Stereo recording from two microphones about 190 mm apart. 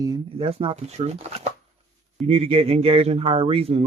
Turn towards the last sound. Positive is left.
turn(degrees=-30)  # may be behind; listen again after turning